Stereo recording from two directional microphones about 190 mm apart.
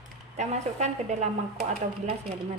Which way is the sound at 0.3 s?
35° right (ahead or behind).